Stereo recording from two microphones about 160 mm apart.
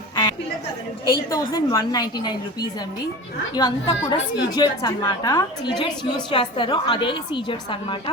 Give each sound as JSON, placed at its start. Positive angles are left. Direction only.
{"t": 1.0, "sound": "a woman's voice", "side_deg": 25}